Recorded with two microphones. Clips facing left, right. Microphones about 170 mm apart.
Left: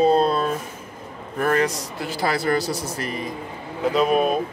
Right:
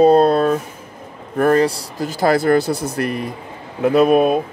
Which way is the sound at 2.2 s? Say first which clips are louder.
Right 8 dB; 50° right (ahead or behind).